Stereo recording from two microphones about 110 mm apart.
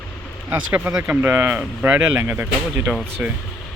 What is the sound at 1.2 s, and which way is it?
Speech, 20° right (ahead or behind).